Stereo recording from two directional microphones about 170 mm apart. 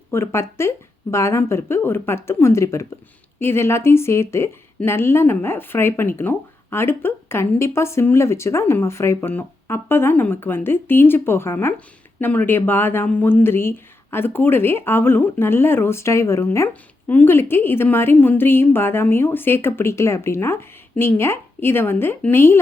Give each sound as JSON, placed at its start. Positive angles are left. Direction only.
{"t": 0.1, "sound": "a woman's voice", "side_deg": 15}